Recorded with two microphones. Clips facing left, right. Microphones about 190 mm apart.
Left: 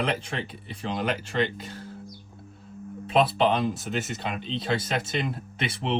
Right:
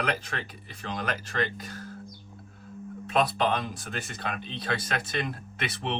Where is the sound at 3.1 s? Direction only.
25° left (ahead or behind).